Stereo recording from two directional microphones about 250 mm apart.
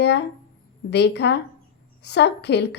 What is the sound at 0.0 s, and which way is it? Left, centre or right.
A woman's voice, left.